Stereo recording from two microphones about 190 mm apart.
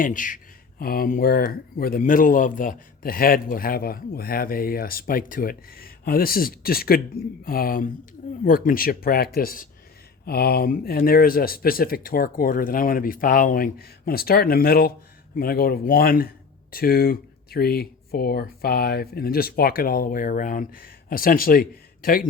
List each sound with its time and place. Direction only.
0.0 s speech: 45° left (ahead or behind)